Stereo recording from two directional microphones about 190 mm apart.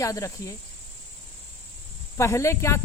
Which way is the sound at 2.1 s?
15° left (ahead or behind).